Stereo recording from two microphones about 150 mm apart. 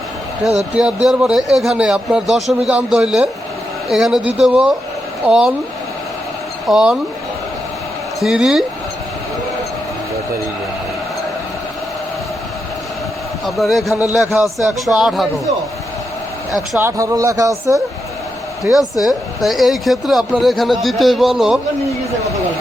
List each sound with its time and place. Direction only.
0.8 s speech: 5° right (ahead or behind)
6.7 s speech: 5° right (ahead or behind)
8.2 s speech: 5° right (ahead or behind)
13.4 s speech: centre (ahead or behind)
16.5 s speech: centre (ahead or behind)
16.8 s speech: 20° right (ahead or behind)
18.6 s speech: centre (ahead or behind)